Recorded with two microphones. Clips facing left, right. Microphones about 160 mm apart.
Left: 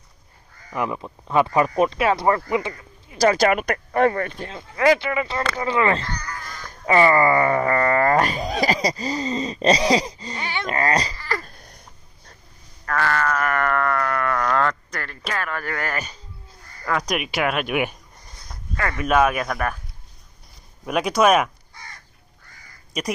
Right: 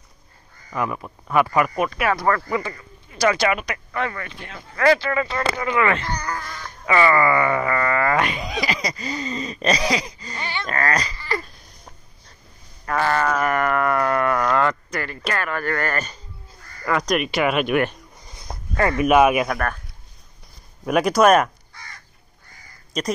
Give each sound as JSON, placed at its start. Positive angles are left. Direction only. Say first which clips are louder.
{"t": 0.7, "sound": "speech", "louder": "even", "side_deg": 20}
{"t": 3.2, "sound": "speech", "louder": "left 2 dB", "side_deg": 45}
{"t": 4.5, "sound": "speech", "louder": "right 1 dB", "side_deg": 20}
{"t": 5.6, "sound": "speech", "louder": "left 1 dB", "side_deg": 30}
{"t": 6.4, "sound": "speech", "louder": "left 2 dB", "side_deg": 45}
{"t": 10.3, "sound": "speech", "louder": "left 1 dB", "side_deg": 15}
{"t": 12.8, "sound": "a sound", "louder": "right 2 dB", "side_deg": -20}
{"t": 14.5, "sound": "speech", "louder": "right 2 dB", "side_deg": -5}
{"t": 18.8, "sound": "speech", "louder": "right 4 dB", "side_deg": -20}
{"t": 19.5, "sound": "speech", "louder": "even", "side_deg": 5}
{"t": 20.8, "sound": "speech", "louder": "right 2 dB", "side_deg": 0}